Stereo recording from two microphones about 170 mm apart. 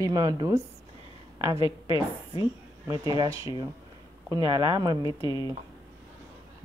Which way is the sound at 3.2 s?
15° right (ahead or behind).